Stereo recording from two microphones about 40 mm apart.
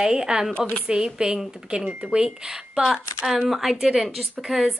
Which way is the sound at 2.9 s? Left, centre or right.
Centre.